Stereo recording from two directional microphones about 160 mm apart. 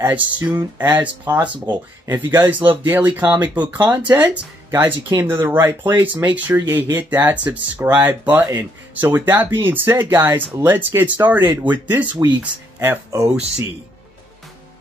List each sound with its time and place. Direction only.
0.0 s speech: 10° right (ahead or behind)